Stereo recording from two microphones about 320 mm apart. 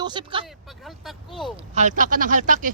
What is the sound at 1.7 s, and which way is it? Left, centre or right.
Speech, right.